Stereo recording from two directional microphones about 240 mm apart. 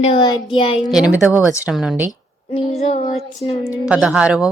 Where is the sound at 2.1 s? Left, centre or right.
Left.